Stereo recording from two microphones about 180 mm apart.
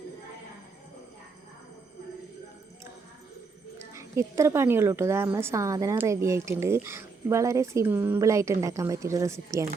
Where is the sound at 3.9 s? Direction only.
15° right (ahead or behind).